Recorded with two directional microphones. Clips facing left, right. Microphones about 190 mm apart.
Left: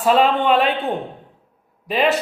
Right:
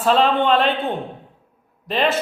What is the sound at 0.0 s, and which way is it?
Speech, 10° left (ahead or behind).